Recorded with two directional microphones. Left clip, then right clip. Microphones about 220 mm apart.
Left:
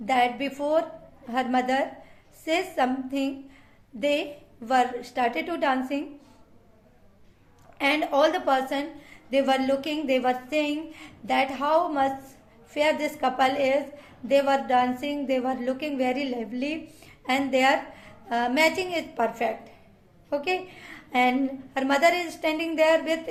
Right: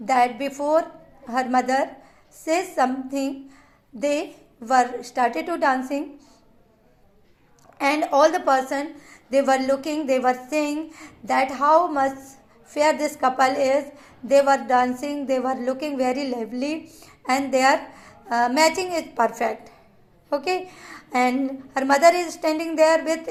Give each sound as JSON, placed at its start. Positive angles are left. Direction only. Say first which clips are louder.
{"t": 0.0, "sound": "a woman's voice", "louder": "right 4 dB", "side_deg": -20}
{"t": 7.8, "sound": "a woman's voice", "louder": "right 4 dB", "side_deg": -20}